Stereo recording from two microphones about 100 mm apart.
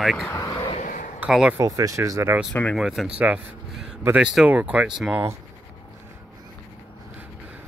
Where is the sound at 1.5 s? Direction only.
35° right (ahead or behind).